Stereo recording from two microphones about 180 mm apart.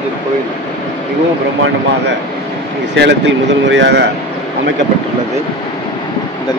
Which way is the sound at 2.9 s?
80° right.